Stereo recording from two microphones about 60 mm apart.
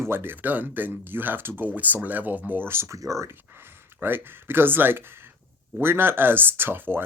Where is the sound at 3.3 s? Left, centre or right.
Right.